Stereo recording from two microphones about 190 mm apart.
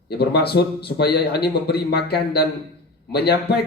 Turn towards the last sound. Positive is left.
turn(degrees=55)  # may be behind; listen again after turning